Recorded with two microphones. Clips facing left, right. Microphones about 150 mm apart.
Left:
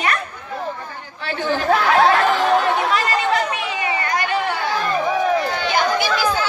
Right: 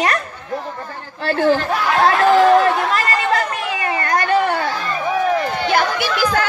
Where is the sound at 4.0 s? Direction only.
50° right (ahead or behind).